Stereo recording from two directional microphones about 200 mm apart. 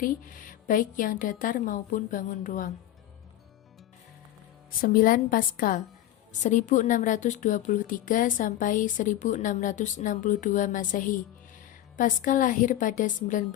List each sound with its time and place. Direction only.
0.0 s a woman's voice: 45° left (ahead or behind)
4.8 s a woman's voice: 45° left (ahead or behind)